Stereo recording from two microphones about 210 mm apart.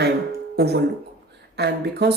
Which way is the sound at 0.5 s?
50° right (ahead or behind).